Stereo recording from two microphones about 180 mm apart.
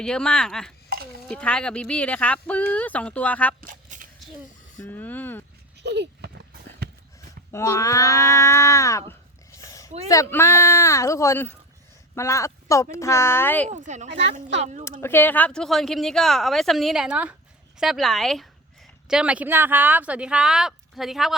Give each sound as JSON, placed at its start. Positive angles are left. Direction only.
{"t": 0.0, "sound": "a woman's voice", "side_deg": 5}
{"t": 3.6, "sound": "a sound", "side_deg": -45}
{"t": 4.8, "sound": "speech", "side_deg": 10}
{"t": 5.8, "sound": "a sound", "side_deg": -70}
{"t": 6.8, "sound": "run", "side_deg": -65}
{"t": 7.5, "sound": "speech", "side_deg": 15}
{"t": 9.5, "sound": "a sound", "side_deg": 20}
{"t": 10.1, "sound": "speech", "side_deg": 15}
{"t": 13.7, "sound": "speech", "side_deg": -40}
{"t": 15.0, "sound": "a woman's voice", "side_deg": 10}